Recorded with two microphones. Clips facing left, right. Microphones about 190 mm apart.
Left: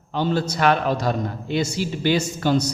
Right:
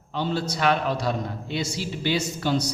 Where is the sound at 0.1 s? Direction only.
50° left (ahead or behind).